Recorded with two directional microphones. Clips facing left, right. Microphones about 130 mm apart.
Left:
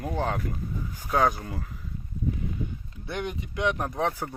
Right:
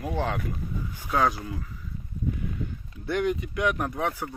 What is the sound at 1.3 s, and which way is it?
Speech, 50° left (ahead or behind).